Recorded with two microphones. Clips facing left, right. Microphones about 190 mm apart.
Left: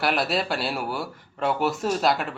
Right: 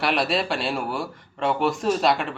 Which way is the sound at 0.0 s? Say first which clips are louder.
Right 1 dB; centre (ahead or behind).